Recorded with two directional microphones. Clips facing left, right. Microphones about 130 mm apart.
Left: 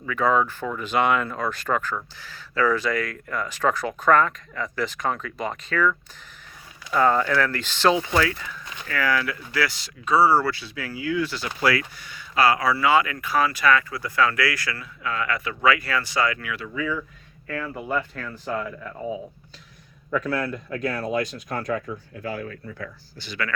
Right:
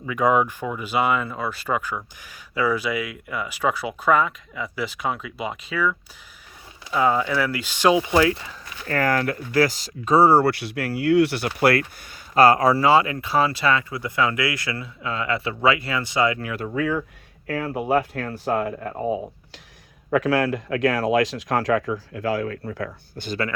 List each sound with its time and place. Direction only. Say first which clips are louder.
0.0 s speech: right 2 dB; 15° right (ahead or behind)
8.9 s speech: right 3 dB; 45° right (ahead or behind); by 16.4 s 20° right (ahead or behind)
16.4 s speech: right 4 dB; 40° right (ahead or behind)
16.6 s speech: right 5 dB; 60° right (ahead or behind)
17.4 s speech: right 5 dB; 75° right (ahead or behind)
20.1 s speech: right 5 dB; 90° right; by 23.2 s 75° right (ahead or behind)